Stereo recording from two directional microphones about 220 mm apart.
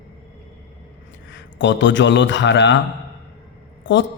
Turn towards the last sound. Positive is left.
turn(degrees=55)  # may be behind; listen again after turning